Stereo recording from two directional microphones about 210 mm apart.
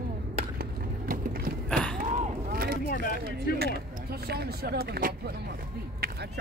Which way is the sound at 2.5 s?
45° right (ahead or behind).